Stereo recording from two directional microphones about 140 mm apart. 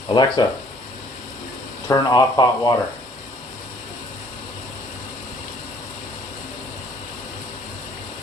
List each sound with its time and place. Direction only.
0.1 s speech: 30° left (ahead or behind)
1.9 s speech: 30° left (ahead or behind)